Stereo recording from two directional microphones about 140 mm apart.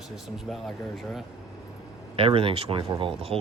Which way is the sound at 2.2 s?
40° right (ahead or behind).